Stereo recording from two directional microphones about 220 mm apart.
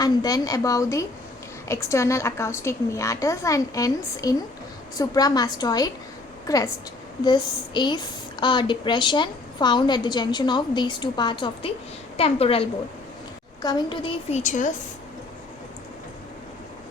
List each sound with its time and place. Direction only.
0.0 s a woman's voice: 15° left (ahead or behind); by 14.7 s 35° left (ahead or behind)